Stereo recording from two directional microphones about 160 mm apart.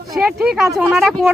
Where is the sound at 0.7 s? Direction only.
Centre (ahead or behind).